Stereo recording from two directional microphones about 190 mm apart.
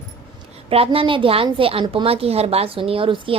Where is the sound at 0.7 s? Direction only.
30° right (ahead or behind).